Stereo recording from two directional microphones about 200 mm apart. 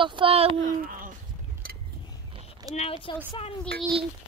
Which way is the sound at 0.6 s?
45° right (ahead or behind).